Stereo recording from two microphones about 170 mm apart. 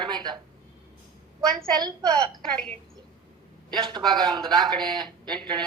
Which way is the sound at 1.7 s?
25° right (ahead or behind).